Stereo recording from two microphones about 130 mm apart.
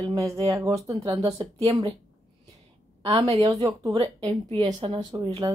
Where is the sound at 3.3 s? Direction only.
35° right (ahead or behind).